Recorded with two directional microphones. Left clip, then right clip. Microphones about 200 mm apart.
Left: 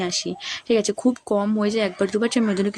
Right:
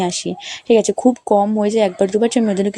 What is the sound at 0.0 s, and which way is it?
Speech, 20° right (ahead or behind).